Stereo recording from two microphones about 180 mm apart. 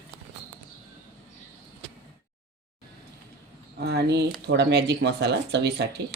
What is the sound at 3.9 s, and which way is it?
Speech, 65° right (ahead or behind).